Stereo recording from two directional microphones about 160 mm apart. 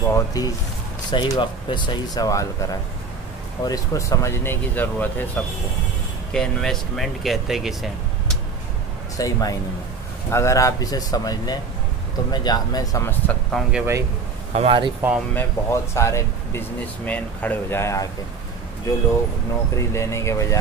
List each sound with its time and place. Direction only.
0.1 s speech: 20° left (ahead or behind); by 8.4 s centre (ahead or behind)
9.1 s speech: 20° left (ahead or behind)
13.5 s speech: centre (ahead or behind)
14.5 s speech: 35° right (ahead or behind)
15.0 s speech: 5° right (ahead or behind)
15.3 s speech: 15° left (ahead or behind)
19.7 s speech: 20° left (ahead or behind)